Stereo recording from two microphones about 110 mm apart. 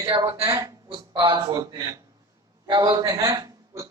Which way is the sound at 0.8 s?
45° right (ahead or behind).